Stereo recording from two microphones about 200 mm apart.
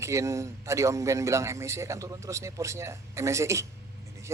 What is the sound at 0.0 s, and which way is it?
Speech, 15° right (ahead or behind).